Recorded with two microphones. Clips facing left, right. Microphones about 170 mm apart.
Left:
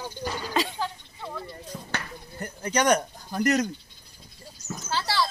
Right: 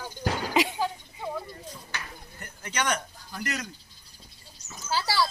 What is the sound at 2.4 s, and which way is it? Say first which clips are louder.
Speech: left 7 dB; 40° left (ahead or behind).